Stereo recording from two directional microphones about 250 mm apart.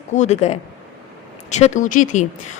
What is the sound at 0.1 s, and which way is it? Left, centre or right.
A woman's voice, left.